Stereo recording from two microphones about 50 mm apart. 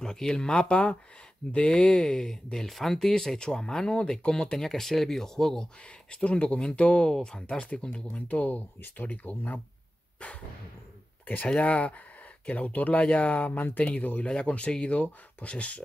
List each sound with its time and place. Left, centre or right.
0.0 s speech: centre
1.7 s speech: centre
6.1 s speech: left
8.3 s speech: left
11.4 s speech: left